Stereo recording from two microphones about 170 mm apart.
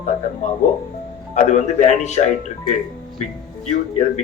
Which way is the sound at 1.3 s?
45° left (ahead or behind).